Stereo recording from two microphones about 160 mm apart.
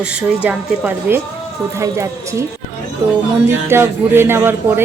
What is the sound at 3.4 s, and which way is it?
A woman's voice, 15° right (ahead or behind).